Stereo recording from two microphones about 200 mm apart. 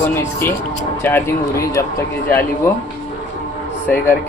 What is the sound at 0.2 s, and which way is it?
Speech, 10° left (ahead or behind).